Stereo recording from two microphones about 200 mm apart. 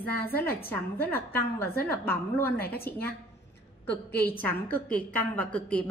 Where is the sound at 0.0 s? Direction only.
10° left (ahead or behind).